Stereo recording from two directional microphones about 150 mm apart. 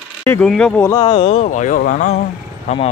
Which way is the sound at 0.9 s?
35° left (ahead or behind).